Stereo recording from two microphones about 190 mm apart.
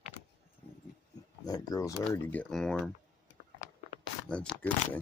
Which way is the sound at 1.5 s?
20° left (ahead or behind).